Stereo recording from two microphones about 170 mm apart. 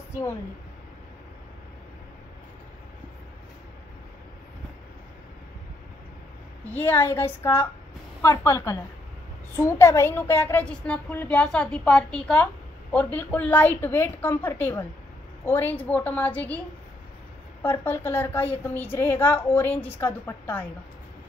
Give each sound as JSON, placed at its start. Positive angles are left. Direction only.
{"t": 6.7, "sound": "a woman's voice", "side_deg": 10}